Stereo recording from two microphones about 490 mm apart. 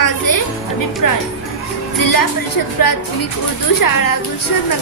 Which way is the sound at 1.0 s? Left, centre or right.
Left.